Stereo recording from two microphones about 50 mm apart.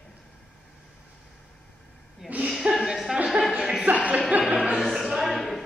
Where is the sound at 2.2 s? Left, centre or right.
Centre.